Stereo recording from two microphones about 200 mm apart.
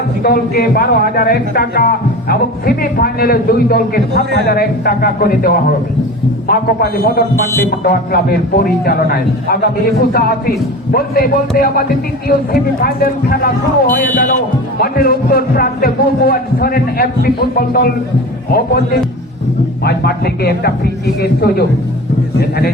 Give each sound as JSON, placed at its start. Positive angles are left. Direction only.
{"t": 0.2, "sound": "a man's voice", "side_deg": 50}
{"t": 6.5, "sound": "a man's voice", "side_deg": 50}
{"t": 19.8, "sound": "a man's voice", "side_deg": 55}